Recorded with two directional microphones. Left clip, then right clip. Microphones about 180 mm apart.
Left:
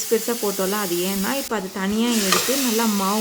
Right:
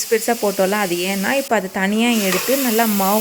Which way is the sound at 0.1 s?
20° right (ahead or behind).